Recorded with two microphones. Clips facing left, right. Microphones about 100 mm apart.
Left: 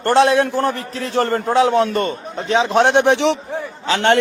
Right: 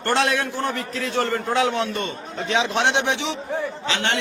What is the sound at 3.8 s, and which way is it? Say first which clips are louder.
Speech: left 12 dB; 45° left (ahead or behind).